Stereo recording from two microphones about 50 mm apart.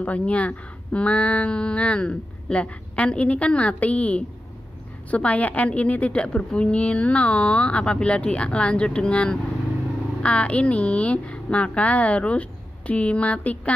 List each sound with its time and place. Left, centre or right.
0.0 s a woman's voice: left